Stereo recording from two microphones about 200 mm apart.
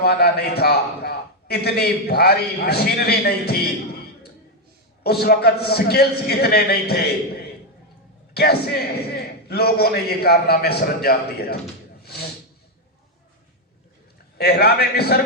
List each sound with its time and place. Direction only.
0.0 s a man's voice: 50° left (ahead or behind)
5.0 s a man's voice: 50° left (ahead or behind)
8.3 s a man's voice: 50° left (ahead or behind)
14.3 s a man's voice: 50° left (ahead or behind)